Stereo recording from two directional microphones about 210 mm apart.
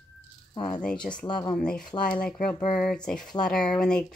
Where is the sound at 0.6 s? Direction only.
5° left (ahead or behind).